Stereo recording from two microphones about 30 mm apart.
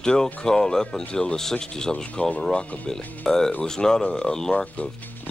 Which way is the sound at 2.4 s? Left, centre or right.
Left.